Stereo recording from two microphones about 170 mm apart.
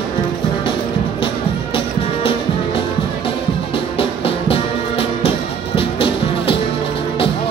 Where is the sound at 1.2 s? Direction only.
30° left (ahead or behind).